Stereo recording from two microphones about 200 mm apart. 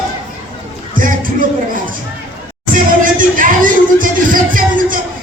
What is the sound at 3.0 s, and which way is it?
Music, 40° right (ahead or behind).